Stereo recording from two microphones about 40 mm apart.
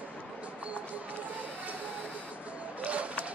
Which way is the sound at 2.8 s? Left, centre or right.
Right.